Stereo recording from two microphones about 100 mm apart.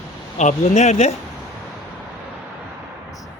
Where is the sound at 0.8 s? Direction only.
90° left.